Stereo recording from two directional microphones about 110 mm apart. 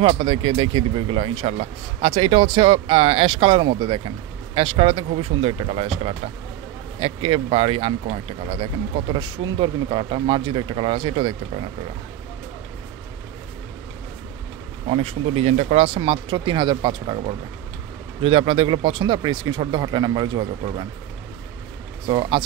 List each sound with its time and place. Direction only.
0.1 s speech: 55° right (ahead or behind)
1.5 s speech: 65° right (ahead or behind); by 4.1 s 50° right (ahead or behind)
4.6 s speech: 60° right (ahead or behind)
9.1 s speech: 45° right (ahead or behind)
14.9 s speech: 60° right (ahead or behind); by 17.2 s 45° right (ahead or behind)
18.2 s speech: 60° right (ahead or behind); by 20.4 s 40° right (ahead or behind)
22.0 s speech: 45° right (ahead or behind)